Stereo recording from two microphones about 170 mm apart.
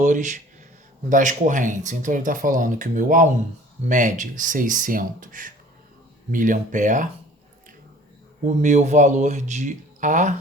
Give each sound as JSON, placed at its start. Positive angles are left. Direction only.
{"t": 0.0, "sound": "speech", "side_deg": -45}
{"t": 8.4, "sound": "speech", "side_deg": -45}